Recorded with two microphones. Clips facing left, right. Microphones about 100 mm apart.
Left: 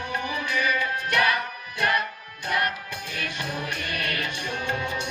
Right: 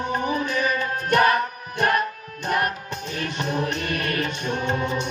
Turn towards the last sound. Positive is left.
turn(degrees=-50)  # may be behind; listen again after turning